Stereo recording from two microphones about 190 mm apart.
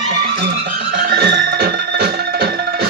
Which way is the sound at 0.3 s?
55° right (ahead or behind).